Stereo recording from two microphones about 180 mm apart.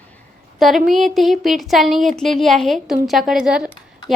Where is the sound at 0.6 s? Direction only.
Centre (ahead or behind).